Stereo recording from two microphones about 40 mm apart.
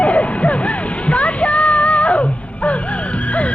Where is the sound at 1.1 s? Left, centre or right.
Left.